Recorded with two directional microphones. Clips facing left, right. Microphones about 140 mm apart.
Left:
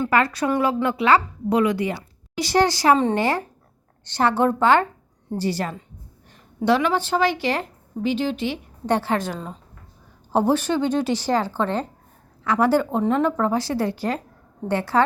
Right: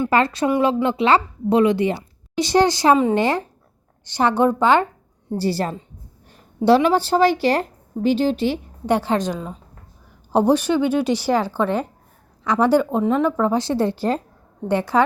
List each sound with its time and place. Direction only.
0.1 s a woman's voice: 25° right (ahead or behind)
5.3 s speech: 30° right (ahead or behind)
8.9 s a woman's voice: 15° right (ahead or behind)
14.7 s a woman's voice: 15° right (ahead or behind)